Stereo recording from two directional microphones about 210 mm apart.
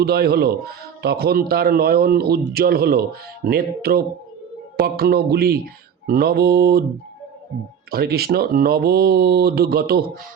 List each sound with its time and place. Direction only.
0.0 s a man's voice: 45° right (ahead or behind)
7.9 s a man's voice: 45° right (ahead or behind)